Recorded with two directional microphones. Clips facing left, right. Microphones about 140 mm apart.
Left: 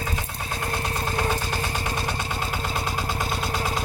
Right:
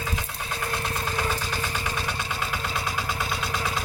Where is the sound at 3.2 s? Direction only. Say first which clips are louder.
Left 2 dB; 45° left (ahead or behind).